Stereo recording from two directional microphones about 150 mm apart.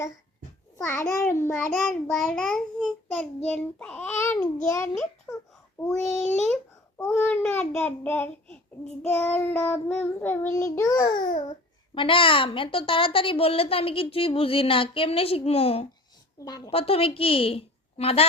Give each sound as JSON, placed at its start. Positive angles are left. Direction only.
{"t": 0.8, "sound": "a child's voice", "side_deg": 15}
{"t": 1.1, "sound": "child singing", "side_deg": 15}
{"t": 5.3, "sound": "baby cry", "side_deg": 25}
{"t": 5.9, "sound": "a child's voice", "side_deg": 5}
{"t": 7.1, "sound": "child singing", "side_deg": 10}
{"t": 11.9, "sound": "a woman's voice", "side_deg": 35}
{"t": 16.4, "sound": "a woman's voice", "side_deg": 25}
{"t": 16.6, "sound": "a woman's voice", "side_deg": 40}